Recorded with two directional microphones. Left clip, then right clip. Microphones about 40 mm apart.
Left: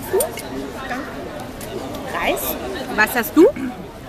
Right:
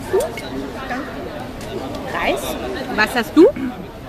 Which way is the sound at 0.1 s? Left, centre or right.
Left.